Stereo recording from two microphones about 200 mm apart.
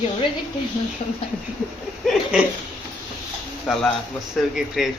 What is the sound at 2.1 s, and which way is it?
Speech, 5° right (ahead or behind).